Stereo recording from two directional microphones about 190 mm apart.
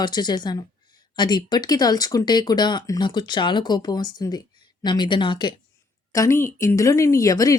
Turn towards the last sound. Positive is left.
turn(degrees=20)  # may be behind; listen again after turning